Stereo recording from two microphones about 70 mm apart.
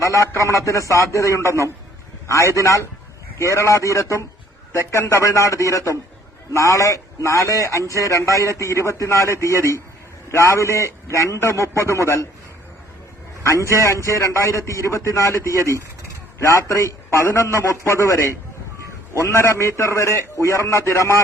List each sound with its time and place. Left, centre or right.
0.0 s a man's voice: left
13.4 s a man's voice: left
19.2 s a man's voice: left